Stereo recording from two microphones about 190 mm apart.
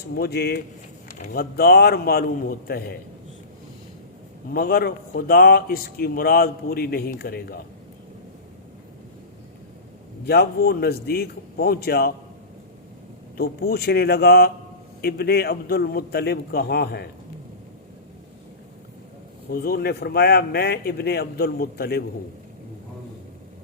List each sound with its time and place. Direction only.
0.2 s speech: 60° left (ahead or behind)
4.5 s speech: 50° left (ahead or behind)
10.2 s speech: 55° left (ahead or behind)
13.3 s speech: 55° left (ahead or behind)
19.5 s speech: 50° left (ahead or behind)